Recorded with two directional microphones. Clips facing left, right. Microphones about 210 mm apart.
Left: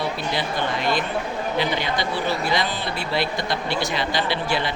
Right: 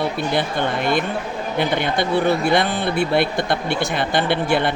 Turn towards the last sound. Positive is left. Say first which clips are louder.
# right 5 dB
turn(degrees=-55)  # may be behind; listen again after turning